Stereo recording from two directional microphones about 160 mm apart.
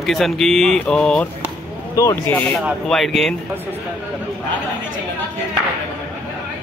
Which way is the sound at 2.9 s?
Centre (ahead or behind).